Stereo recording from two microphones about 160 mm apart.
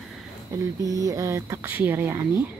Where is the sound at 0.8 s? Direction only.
20° right (ahead or behind).